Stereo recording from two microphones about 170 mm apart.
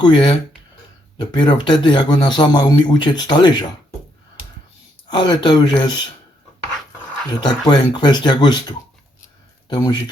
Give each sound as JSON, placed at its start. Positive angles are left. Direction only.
{"t": 0.0, "sound": "speech", "side_deg": 25}
{"t": 5.0, "sound": "speech", "side_deg": 25}
{"t": 7.4, "sound": "speech", "side_deg": 25}